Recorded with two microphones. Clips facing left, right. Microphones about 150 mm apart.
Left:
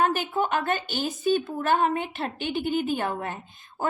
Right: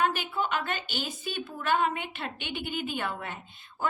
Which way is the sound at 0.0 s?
45° left (ahead or behind).